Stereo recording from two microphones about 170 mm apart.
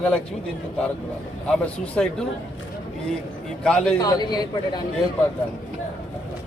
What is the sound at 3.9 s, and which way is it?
Speech, 25° left (ahead or behind).